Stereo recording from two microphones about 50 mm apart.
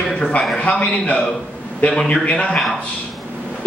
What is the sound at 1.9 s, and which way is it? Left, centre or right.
Speech, centre.